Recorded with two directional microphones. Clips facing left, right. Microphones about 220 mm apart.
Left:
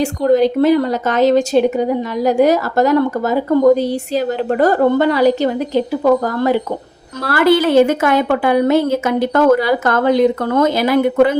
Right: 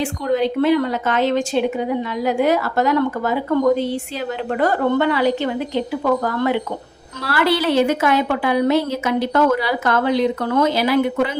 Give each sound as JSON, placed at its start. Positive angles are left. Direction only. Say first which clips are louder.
{"t": 0.0, "sound": "a woman's voice", "louder": "left 6 dB", "side_deg": 40}